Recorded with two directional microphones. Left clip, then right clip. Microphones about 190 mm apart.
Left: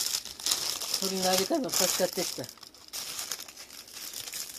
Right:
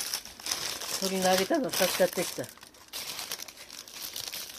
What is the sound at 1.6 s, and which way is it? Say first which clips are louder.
Speech: right 2 dB; 5° right (ahead or behind).